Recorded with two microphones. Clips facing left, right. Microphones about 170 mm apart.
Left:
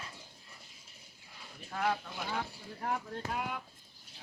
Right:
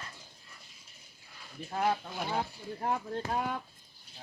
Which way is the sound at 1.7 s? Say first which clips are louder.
Right 3 dB; 30° right (ahead or behind).